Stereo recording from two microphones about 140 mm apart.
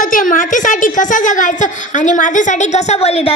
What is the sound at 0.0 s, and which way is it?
A woman's voice, 70° left (ahead or behind).